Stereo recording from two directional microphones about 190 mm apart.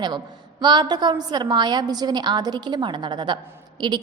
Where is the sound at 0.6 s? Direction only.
25° right (ahead or behind).